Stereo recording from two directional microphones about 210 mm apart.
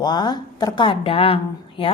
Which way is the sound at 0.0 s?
20° left (ahead or behind).